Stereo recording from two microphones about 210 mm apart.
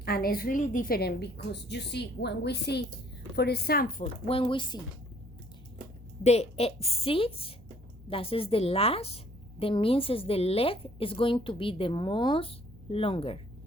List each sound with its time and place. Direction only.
0.0 s a woman's voice: 45° left (ahead or behind)
4.3 s a woman's voice: 25° left (ahead or behind)
6.2 s a woman's voice: 30° left (ahead or behind)